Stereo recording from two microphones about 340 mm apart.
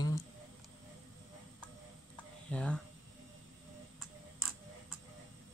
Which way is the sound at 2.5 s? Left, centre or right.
Centre.